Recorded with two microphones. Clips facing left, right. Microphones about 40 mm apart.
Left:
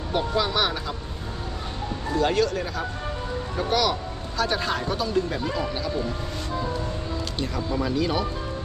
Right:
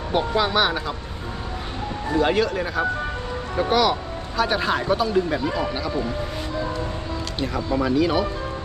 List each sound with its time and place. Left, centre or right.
0.1 s speech: centre
2.1 s speech: centre
7.3 s speech: centre